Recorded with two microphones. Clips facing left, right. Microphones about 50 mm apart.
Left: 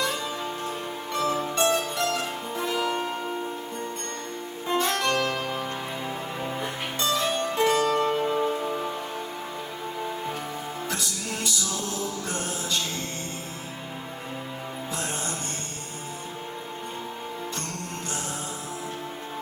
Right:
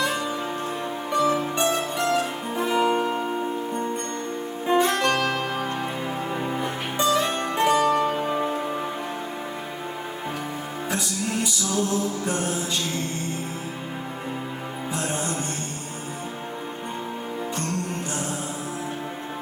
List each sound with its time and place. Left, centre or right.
1.2 s music: right
4.6 s music: right
7.1 s music: right
8.0 s music: centre